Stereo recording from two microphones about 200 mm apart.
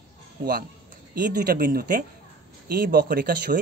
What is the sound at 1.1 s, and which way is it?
A man's voice, 45° right (ahead or behind).